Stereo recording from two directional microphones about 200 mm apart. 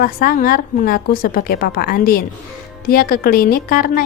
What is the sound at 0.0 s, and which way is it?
A woman's voice, 45° left (ahead or behind).